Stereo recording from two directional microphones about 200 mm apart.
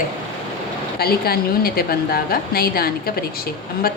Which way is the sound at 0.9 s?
50° left (ahead or behind).